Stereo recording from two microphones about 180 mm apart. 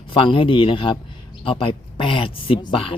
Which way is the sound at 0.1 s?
30° left (ahead or behind).